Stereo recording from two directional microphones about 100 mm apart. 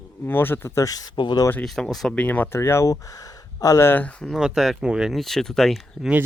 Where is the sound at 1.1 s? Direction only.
50° left (ahead or behind).